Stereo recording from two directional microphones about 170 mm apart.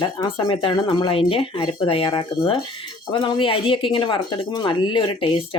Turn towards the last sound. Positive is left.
turn(degrees=30)  # may be behind; listen again after turning